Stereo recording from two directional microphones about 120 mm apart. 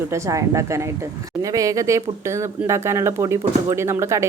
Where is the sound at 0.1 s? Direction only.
25° right (ahead or behind).